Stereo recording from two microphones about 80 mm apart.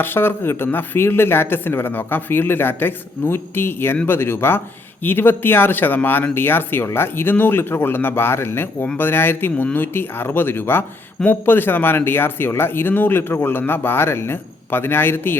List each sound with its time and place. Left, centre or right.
0.0 s speech: left